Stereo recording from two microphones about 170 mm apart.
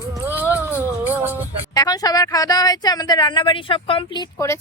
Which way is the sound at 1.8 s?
20° left (ahead or behind).